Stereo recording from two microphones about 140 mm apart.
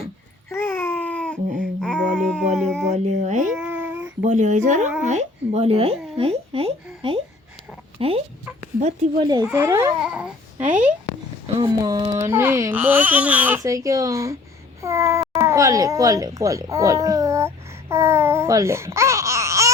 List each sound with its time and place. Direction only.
0.5 s babbling: 15° left (ahead or behind)
1.8 s speech: 5° left (ahead or behind)
2.9 s speech: 55° right (ahead or behind)
3.5 s child singing: 10° right (ahead or behind)
4.2 s speech: 60° right (ahead or behind); by 8.2 s 45° right (ahead or behind)
9.2 s speech: 30° right (ahead or behind)
10.0 s babbling: 5° right (ahead or behind)
11.4 s speech: 35° right (ahead or behind)
12.1 s speech: 20° right (ahead or behind)
13.6 s a child's voice: 25° right (ahead or behind)